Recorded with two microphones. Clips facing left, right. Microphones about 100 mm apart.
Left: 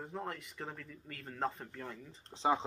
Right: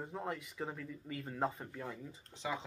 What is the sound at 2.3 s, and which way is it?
Speech, 30° left (ahead or behind).